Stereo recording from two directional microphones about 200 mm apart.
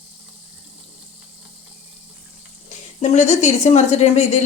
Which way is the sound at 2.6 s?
35° left (ahead or behind).